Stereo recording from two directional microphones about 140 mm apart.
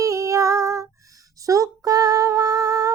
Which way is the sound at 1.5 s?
25° right (ahead or behind).